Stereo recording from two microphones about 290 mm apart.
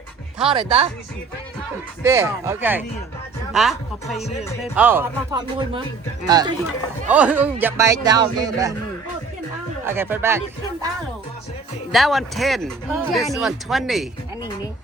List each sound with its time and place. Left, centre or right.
0.5 s speech: right
2.0 s speech: centre
9.8 s speech: centre
11.9 s speech: centre